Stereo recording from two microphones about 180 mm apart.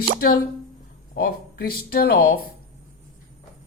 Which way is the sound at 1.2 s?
55° left (ahead or behind).